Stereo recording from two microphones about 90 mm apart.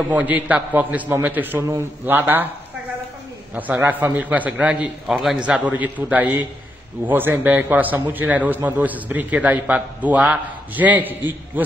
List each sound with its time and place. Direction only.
0.1 s a man's voice: 20° right (ahead or behind)
3.5 s a man's voice: 20° right (ahead or behind); by 5.4 s 5° right (ahead or behind)
5.4 s a man's voice: 15° right (ahead or behind)